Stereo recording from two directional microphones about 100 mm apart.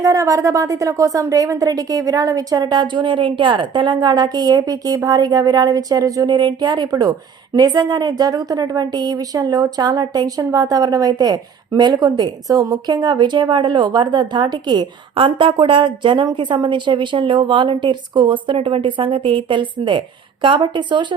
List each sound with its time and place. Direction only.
0.0 s a woman's voice: 35° right (ahead or behind)
6.3 s a woman's voice: 50° right (ahead or behind)